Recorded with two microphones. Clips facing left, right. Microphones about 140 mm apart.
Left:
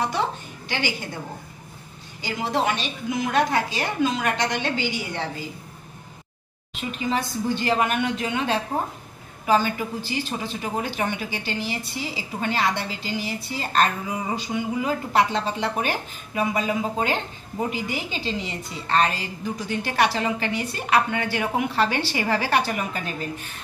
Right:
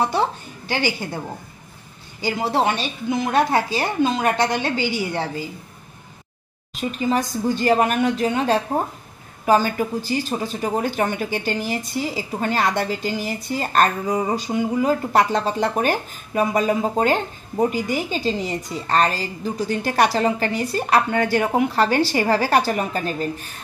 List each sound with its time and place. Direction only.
2.5 s speech: 30° right (ahead or behind)
6.7 s speech: 40° right (ahead or behind)